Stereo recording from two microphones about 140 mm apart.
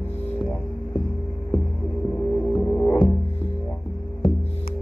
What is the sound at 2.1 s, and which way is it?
Music, 10° left (ahead or behind).